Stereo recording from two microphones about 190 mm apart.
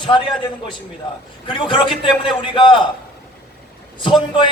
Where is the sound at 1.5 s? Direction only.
25° left (ahead or behind).